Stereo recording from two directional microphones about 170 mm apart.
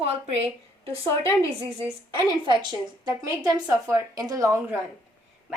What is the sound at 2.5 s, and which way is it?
A woman's voice, 25° right (ahead or behind).